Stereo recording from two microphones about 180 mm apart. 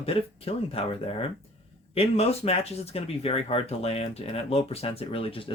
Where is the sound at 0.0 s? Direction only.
30° left (ahead or behind).